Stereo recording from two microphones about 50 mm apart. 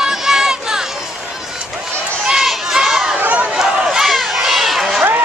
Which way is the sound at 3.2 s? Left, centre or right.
Right.